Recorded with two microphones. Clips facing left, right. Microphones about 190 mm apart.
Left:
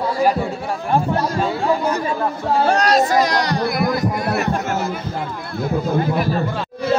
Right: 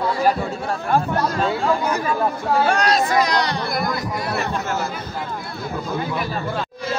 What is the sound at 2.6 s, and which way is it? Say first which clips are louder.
Speech: left 4 dB; 35° left (ahead or behind).